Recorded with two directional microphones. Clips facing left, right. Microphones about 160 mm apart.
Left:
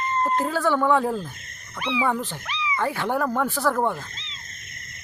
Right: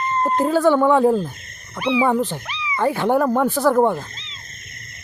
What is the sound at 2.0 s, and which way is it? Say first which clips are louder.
Speech: right 6 dB; 20° right (ahead or behind).